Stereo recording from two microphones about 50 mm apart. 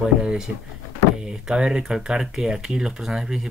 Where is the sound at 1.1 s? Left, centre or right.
Centre.